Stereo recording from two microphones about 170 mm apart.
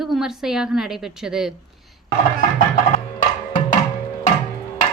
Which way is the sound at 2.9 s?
50° left (ahead or behind).